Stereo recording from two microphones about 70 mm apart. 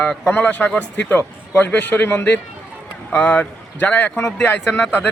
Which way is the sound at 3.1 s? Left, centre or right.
Centre.